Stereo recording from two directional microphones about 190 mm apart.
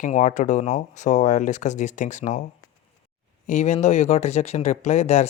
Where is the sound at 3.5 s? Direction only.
40° left (ahead or behind).